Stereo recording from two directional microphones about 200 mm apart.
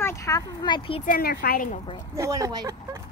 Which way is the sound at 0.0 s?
15° left (ahead or behind).